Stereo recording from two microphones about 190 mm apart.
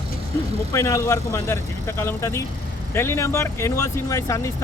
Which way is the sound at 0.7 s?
15° left (ahead or behind).